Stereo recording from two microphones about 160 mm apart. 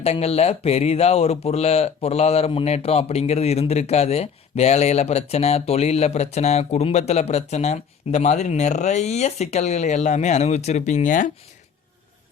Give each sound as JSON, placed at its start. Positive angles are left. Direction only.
{"t": 0.0, "sound": "speech", "side_deg": 40}